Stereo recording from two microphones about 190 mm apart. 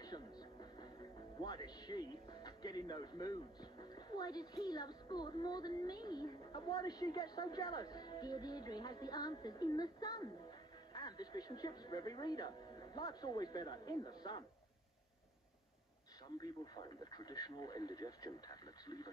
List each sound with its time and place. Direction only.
0.0 s music: 20° left (ahead or behind)
4.6 s speech: 20° left (ahead or behind)
16.3 s speech: 20° left (ahead or behind)